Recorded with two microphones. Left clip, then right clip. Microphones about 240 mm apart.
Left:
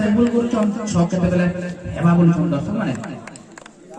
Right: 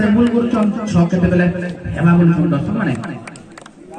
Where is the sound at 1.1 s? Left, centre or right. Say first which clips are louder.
Right 4 dB; left.